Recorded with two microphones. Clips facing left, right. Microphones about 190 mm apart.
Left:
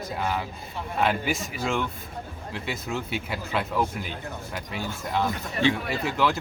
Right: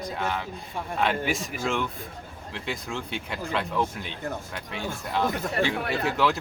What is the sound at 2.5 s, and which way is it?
A man's voice, 5° left (ahead or behind).